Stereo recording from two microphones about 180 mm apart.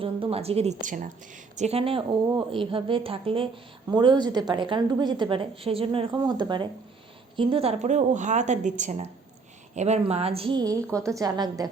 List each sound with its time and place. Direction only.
0.0 s a woman's voice: 30° right (ahead or behind)